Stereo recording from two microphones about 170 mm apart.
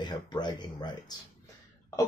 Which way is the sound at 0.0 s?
25° left (ahead or behind).